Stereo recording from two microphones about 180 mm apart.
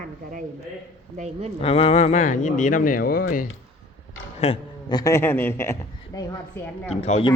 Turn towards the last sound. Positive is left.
turn(degrees=35)  # may be behind; listen again after turning